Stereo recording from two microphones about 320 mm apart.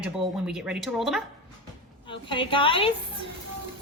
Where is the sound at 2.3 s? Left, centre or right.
Centre.